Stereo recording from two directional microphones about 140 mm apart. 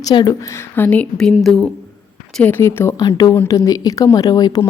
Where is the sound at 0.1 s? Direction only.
30° left (ahead or behind).